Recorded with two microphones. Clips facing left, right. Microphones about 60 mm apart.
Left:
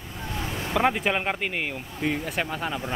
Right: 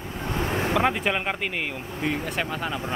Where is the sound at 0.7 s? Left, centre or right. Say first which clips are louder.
Left 3 dB; centre.